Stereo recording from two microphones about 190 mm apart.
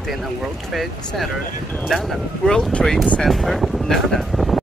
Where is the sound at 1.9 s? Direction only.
Centre (ahead or behind).